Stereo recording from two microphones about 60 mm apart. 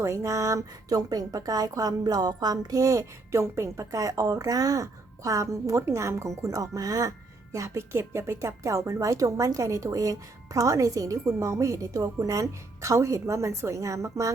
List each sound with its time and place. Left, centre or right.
0.0 s a woman's voice: right
3.9 s a woman's voice: right
7.5 s speech: right
11.3 s speech: right